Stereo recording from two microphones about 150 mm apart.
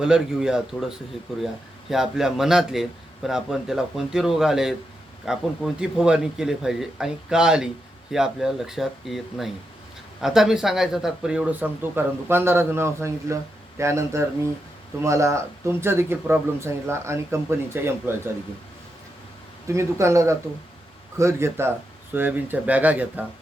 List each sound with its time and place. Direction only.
0.0 s a man's voice: 5° right (ahead or behind)
19.6 s speech: 20° right (ahead or behind)